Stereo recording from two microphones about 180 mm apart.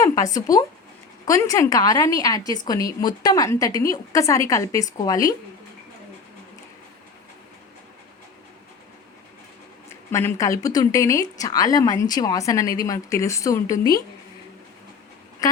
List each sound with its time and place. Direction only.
0.0 s a woman's voice: 20° left (ahead or behind)
10.1 s speech: 15° left (ahead or behind)